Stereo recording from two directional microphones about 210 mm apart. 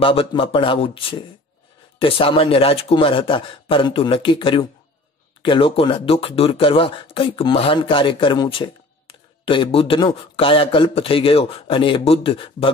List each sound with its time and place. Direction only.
0.0 s speech: 25° left (ahead or behind)